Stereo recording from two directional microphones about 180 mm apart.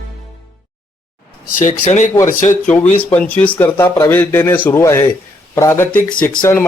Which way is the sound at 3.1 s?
10° left (ahead or behind).